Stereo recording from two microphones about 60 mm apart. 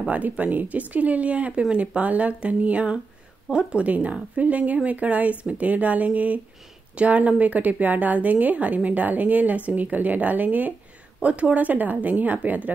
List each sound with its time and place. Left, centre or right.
0.1 s a woman's voice: right